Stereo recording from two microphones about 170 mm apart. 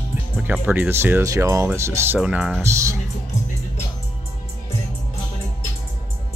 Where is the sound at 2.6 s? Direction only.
15° right (ahead or behind).